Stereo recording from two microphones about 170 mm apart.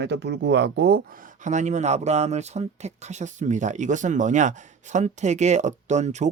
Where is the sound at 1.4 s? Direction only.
45° right (ahead or behind).